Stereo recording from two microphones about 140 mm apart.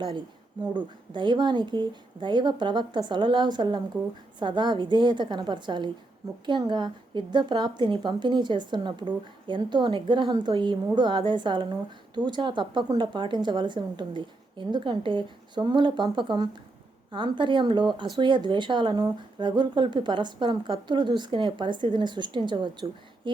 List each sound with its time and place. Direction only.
1.1 s a woman's voice: 35° right (ahead or behind)